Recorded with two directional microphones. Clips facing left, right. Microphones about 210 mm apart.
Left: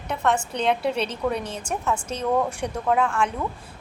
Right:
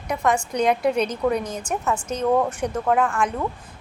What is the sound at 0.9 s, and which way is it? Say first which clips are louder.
Speech: right 4 dB; 30° left (ahead or behind).